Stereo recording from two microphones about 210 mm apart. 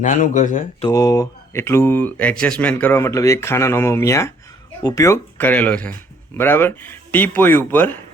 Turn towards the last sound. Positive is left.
turn(degrees=10)  # may be behind; listen again after turning